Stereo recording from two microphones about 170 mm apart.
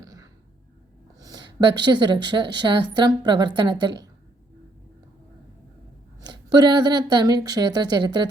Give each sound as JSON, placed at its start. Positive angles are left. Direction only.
{"t": 0.0, "sound": "a sound", "side_deg": -20}
{"t": 1.8, "sound": "a woman's voice", "side_deg": -25}
{"t": 6.1, "sound": "a woman's voice", "side_deg": -25}